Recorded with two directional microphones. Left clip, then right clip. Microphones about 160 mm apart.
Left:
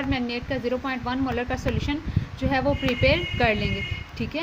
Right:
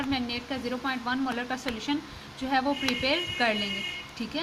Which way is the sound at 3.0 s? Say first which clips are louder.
Left 6 dB; 45° left (ahead or behind).